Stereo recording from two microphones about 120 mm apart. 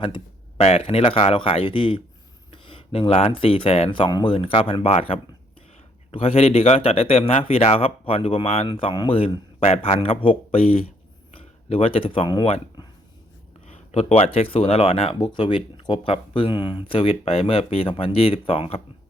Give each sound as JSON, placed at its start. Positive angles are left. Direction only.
{"t": 0.0, "sound": "speech", "side_deg": 45}
{"t": 9.6, "sound": "speech", "side_deg": 70}
{"t": 13.7, "sound": "speech", "side_deg": 60}